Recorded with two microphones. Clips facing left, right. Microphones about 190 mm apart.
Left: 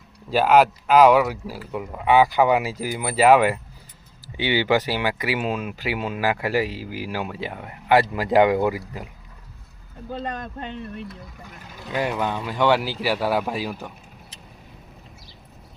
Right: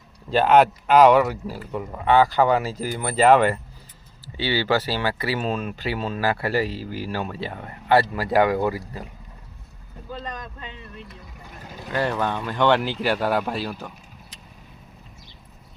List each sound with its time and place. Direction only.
0.3 s speech: 5° left (ahead or behind)
10.1 s speech: 55° left (ahead or behind)
11.9 s speech: 15° left (ahead or behind)